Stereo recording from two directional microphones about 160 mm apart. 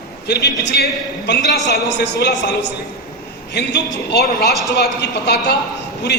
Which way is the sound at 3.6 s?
90° left.